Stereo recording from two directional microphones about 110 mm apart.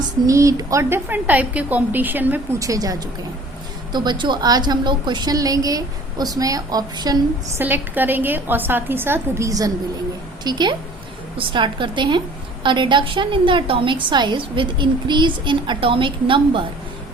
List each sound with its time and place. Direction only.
0.3 s a woman's voice: 30° right (ahead or behind)
2.6 s a woman's voice: 30° right (ahead or behind)
7.6 s a woman's voice: 15° right (ahead or behind); by 16.6 s 50° right (ahead or behind)